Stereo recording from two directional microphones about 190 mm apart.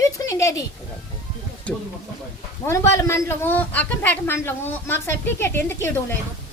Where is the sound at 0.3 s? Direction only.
15° left (ahead or behind).